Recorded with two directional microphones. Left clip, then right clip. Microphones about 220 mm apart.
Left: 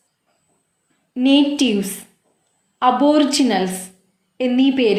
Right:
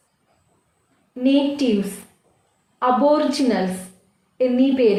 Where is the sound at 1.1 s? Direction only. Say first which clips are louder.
Left 4 dB; 35° left (ahead or behind).